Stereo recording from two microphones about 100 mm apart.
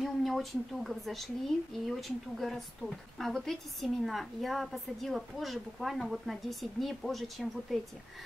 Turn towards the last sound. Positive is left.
turn(degrees=0)  # may be behind; listen again after turning